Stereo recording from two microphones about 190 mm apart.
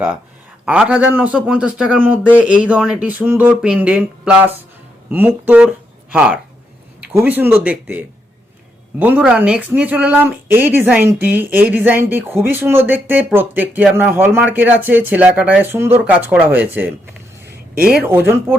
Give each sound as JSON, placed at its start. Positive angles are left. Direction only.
{"t": 0.6, "sound": "speech", "side_deg": -5}
{"t": 17.5, "sound": "a sound", "side_deg": -55}
{"t": 18.0, "sound": "speech", "side_deg": -10}